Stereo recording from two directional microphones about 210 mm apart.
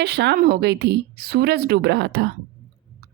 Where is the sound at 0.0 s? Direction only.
50° right (ahead or behind).